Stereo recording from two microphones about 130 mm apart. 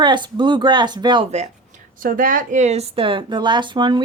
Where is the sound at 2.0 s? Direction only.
90° right.